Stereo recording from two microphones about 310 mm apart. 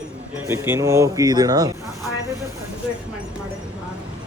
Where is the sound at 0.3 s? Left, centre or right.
Centre.